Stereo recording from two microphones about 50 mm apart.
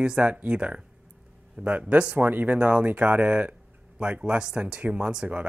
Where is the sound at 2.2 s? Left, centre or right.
Right.